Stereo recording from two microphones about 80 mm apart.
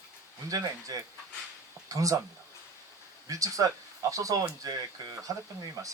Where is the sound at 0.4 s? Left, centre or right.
Right.